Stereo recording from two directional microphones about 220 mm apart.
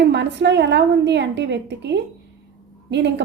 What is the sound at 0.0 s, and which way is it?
A woman's voice, 50° right (ahead or behind).